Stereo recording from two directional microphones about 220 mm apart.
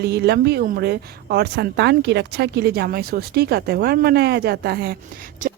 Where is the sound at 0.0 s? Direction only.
50° right (ahead or behind).